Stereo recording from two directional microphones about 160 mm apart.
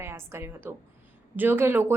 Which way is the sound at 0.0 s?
15° right (ahead or behind).